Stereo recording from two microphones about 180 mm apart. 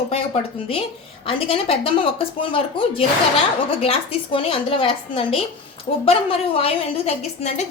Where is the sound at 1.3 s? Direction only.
30° left (ahead or behind).